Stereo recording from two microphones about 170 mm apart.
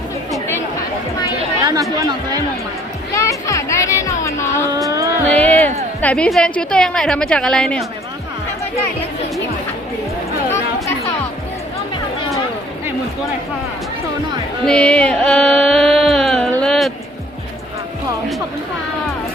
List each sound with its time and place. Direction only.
1.6 s speech: 20° right (ahead or behind)
3.2 s music: 20° left (ahead or behind)
4.9 s music: 20° right (ahead or behind)
5.3 s music: 10° left (ahead or behind)
6.0 s a woman's voice: 5° left (ahead or behind)
14.6 s music: 5° left (ahead or behind)